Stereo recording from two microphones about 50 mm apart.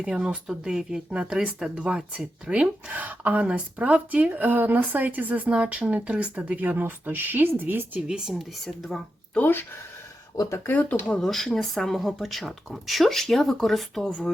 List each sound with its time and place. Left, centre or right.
0.1 s speech: centre
2.9 s speech: right
8.0 s speech: centre
8.3 s speech: centre
9.4 s speech: left
10.7 s speech: left
11.2 s speech: centre